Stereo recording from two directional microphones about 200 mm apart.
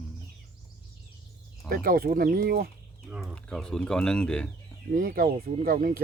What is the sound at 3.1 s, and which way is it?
Speech, 5° right (ahead or behind).